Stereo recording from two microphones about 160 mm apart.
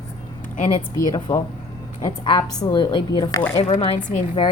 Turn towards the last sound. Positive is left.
turn(degrees=50)  # may be behind; listen again after turning